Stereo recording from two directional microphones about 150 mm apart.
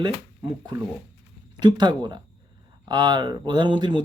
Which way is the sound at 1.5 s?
30° right (ahead or behind).